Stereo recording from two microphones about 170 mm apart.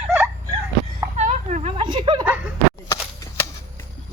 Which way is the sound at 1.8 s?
25° right (ahead or behind).